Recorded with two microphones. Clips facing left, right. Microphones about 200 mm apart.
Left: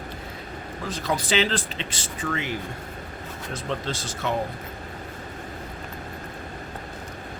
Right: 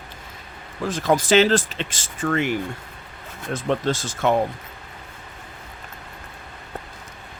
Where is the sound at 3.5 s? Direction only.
50° right (ahead or behind).